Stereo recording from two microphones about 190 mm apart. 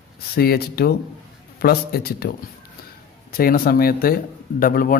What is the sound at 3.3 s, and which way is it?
A man's voice, 50° left (ahead or behind).